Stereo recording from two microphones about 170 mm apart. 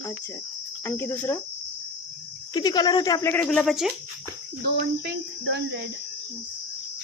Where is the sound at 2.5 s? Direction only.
25° left (ahead or behind).